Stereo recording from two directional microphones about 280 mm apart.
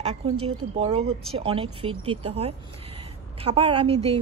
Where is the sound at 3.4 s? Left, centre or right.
Centre.